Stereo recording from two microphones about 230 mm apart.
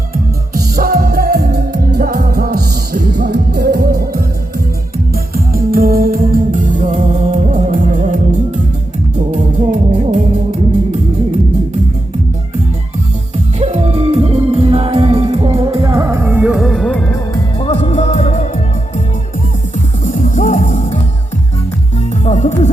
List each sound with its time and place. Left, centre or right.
0.5 s music: right
9.3 s music: right
13.6 s music: right; by 17.2 s centre
17.3 s music: left
20.1 s music: left
22.2 s music: left